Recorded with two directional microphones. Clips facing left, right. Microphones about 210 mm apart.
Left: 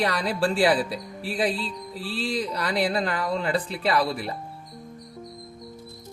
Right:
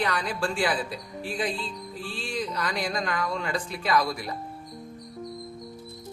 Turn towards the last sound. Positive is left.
turn(degrees=30)  # may be behind; listen again after turning